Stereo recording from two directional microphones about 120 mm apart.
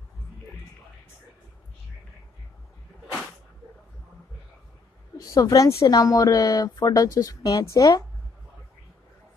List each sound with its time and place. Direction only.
5.1 s speech: 30° left (ahead or behind)